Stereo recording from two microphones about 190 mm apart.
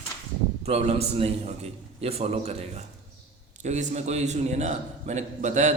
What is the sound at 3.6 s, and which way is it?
A man's voice, 40° right (ahead or behind).